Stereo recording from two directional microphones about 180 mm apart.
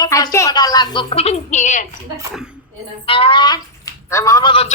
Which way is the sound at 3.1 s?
30° left (ahead or behind).